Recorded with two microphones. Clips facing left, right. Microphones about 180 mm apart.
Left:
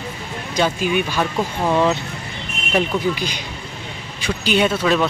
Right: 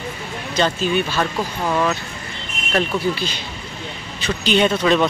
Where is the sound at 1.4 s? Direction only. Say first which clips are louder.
Left 5 dB; 25° left (ahead or behind).